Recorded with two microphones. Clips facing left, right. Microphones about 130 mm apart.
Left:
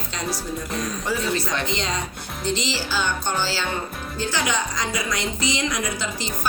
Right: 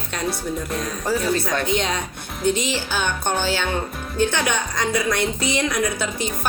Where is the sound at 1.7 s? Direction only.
65° right (ahead or behind).